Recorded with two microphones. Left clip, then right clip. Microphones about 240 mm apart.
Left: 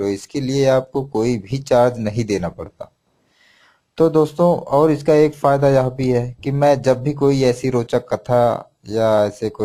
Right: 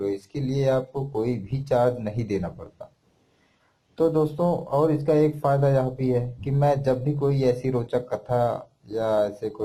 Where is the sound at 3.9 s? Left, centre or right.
Left.